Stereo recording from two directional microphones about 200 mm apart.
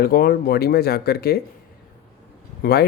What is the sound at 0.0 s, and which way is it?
Speech, 50° left (ahead or behind).